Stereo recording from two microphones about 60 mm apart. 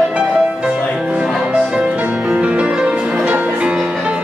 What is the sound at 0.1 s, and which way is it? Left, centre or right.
Music, centre.